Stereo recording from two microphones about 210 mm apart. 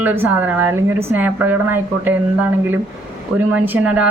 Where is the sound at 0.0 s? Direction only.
10° right (ahead or behind).